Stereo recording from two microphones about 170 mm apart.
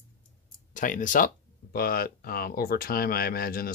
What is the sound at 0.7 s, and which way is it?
Speech, 50° left (ahead or behind).